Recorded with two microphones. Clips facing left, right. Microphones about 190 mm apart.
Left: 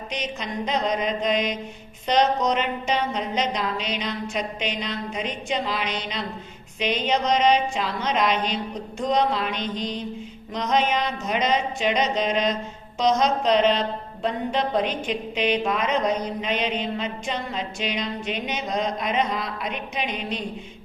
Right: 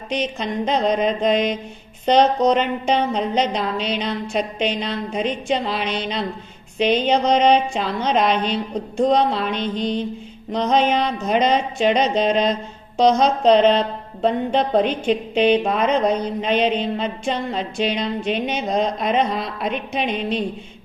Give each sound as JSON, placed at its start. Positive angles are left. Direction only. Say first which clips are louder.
{"t": 0.1, "sound": "a woman's voice", "louder": "right 8 dB", "side_deg": -30}